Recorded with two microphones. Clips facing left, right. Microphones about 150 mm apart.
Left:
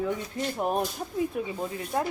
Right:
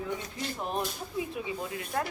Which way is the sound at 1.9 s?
25° left (ahead or behind).